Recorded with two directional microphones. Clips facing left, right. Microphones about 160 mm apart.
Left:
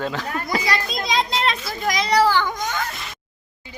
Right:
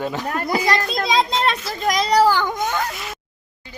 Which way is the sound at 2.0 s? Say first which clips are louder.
Right 1 dB; 40° right (ahead or behind).